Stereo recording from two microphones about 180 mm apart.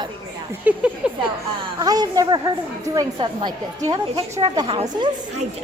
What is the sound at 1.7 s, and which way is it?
A woman's voice, 20° right (ahead or behind).